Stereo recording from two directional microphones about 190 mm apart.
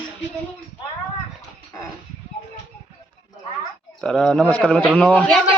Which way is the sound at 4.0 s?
5° left (ahead or behind).